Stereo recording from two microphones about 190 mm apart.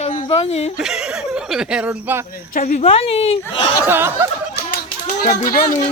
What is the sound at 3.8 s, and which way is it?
Chuckle, 10° right (ahead or behind).